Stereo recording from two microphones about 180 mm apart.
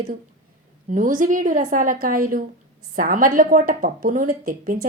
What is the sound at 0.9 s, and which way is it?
A woman's voice, 45° right (ahead or behind).